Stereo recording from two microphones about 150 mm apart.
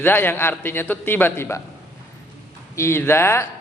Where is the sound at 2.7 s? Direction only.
15° left (ahead or behind).